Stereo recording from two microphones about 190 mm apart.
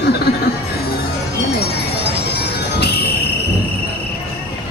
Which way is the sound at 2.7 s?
60° left (ahead or behind).